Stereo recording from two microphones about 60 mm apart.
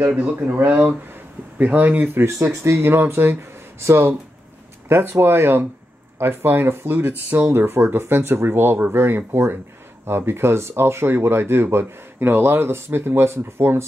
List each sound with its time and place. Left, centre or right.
0.0 s speech: right
2.2 s speech: right